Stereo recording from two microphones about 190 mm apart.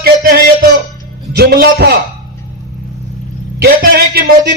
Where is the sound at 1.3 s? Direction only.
55° right (ahead or behind).